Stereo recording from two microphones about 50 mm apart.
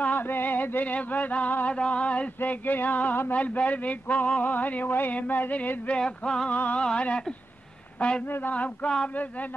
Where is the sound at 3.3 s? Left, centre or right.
Left.